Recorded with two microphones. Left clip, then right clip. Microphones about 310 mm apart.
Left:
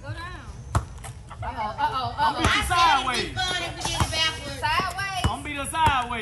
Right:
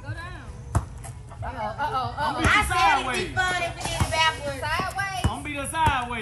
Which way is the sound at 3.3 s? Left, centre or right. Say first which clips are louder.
Right 3 dB; right.